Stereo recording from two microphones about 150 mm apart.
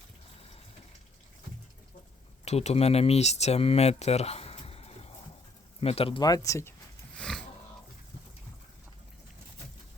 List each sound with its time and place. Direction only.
2.4 s speech: 45° left (ahead or behind)
6.2 s speech: 25° left (ahead or behind)
7.2 s a sound: 5° left (ahead or behind)